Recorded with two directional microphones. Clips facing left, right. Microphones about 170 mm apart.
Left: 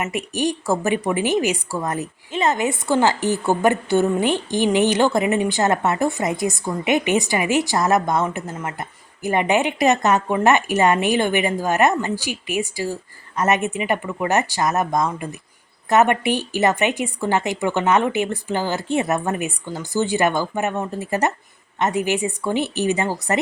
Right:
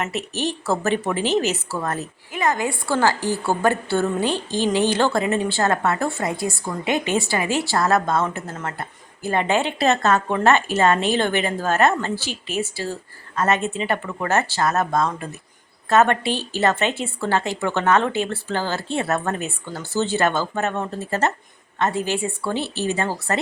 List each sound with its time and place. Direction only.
0.0 s speech: 15° left (ahead or behind)